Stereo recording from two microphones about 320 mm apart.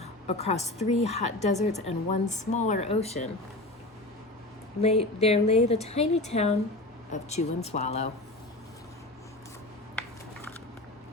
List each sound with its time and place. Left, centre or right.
0.0 s a woman's voice: centre
4.8 s a woman's voice: centre